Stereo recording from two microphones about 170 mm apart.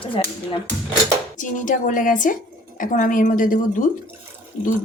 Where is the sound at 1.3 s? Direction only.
50° left (ahead or behind).